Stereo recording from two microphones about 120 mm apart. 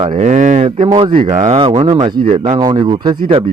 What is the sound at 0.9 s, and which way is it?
Speech, 45° right (ahead or behind).